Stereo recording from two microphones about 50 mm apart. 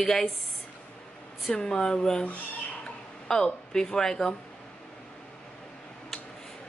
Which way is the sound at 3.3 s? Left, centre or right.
Centre.